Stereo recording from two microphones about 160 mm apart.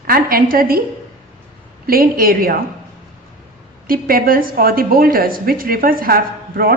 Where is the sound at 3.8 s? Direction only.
65° right (ahead or behind).